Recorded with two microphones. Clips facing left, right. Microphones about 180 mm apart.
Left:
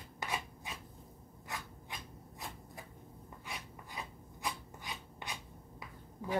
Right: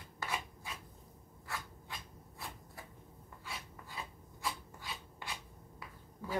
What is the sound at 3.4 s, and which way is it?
Filing, 15° left (ahead or behind).